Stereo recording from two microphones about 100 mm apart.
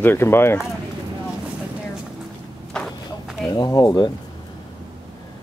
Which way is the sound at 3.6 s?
40° left (ahead or behind).